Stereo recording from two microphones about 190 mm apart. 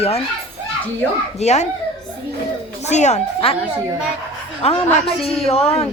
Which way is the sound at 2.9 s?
35° left (ahead or behind).